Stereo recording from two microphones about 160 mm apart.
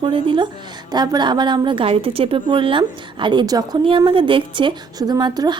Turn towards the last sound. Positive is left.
turn(degrees=-25)  # may be behind; listen again after turning